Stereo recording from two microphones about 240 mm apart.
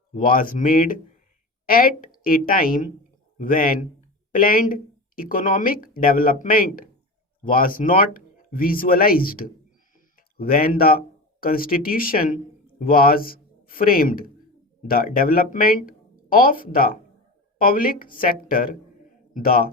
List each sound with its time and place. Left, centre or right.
0.1 s a man's voice: left